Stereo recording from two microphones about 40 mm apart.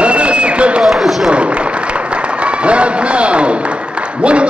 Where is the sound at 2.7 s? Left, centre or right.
Right.